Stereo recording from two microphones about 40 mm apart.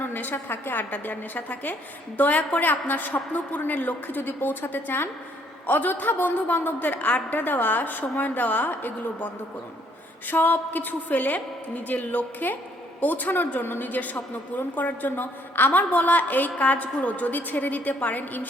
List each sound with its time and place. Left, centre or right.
0.0 s a woman's voice: left